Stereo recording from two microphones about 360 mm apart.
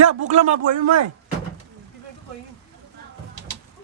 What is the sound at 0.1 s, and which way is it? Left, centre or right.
Speech, right.